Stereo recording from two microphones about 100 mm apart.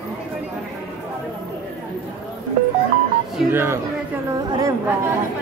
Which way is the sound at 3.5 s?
25° right (ahead or behind).